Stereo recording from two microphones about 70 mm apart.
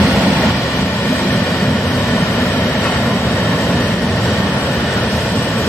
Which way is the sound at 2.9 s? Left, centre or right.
Centre.